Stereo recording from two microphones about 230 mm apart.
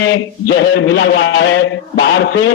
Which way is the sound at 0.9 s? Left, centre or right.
Left.